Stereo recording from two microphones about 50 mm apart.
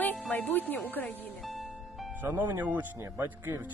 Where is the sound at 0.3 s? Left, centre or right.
Left.